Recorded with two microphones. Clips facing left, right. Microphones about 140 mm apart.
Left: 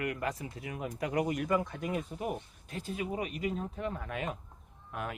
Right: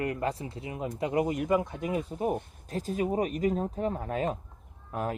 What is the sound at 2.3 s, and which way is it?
Speech, 40° right (ahead or behind).